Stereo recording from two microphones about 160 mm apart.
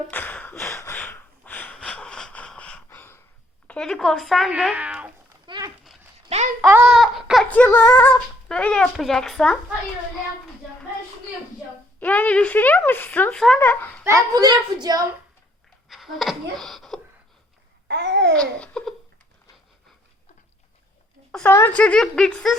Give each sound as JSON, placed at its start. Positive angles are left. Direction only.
{"t": 0.1, "sound": "a sound", "side_deg": 10}
{"t": 3.7, "sound": "speech", "side_deg": 5}
{"t": 5.5, "sound": "a sound", "side_deg": -25}
{"t": 6.2, "sound": "a sound", "side_deg": -40}
{"t": 6.7, "sound": "a sound", "side_deg": -10}
{"t": 7.5, "sound": "speech", "side_deg": 10}
{"t": 11.9, "sound": "speech", "side_deg": 10}
{"t": 14.0, "sound": "a child's voice", "side_deg": -20}
{"t": 15.9, "sound": "speech", "side_deg": 0}
{"t": 17.8, "sound": "babbling", "side_deg": -90}
{"t": 18.3, "sound": "laughter", "side_deg": 5}
{"t": 21.3, "sound": "speech", "side_deg": 15}